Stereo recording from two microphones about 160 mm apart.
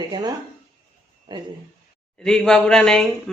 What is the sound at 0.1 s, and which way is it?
Speech, 25° right (ahead or behind).